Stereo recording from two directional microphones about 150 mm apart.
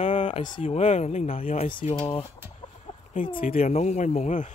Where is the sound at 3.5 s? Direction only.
50° left (ahead or behind).